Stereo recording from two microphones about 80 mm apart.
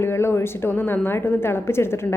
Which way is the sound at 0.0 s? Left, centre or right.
Left.